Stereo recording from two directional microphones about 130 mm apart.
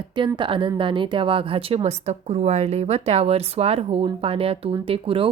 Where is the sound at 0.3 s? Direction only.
40° right (ahead or behind).